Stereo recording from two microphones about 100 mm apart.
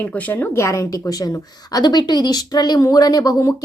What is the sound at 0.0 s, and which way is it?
Speech, 15° left (ahead or behind).